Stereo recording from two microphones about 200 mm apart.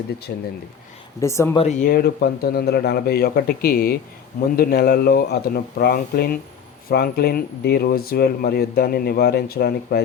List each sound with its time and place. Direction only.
0.3 s speech: 50° left (ahead or behind)
1.2 s speech: 15° left (ahead or behind)
1.5 s speech: 35° left (ahead or behind); by 10.0 s 50° left (ahead or behind)